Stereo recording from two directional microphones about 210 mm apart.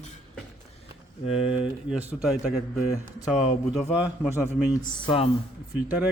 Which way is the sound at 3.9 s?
Centre (ahead or behind).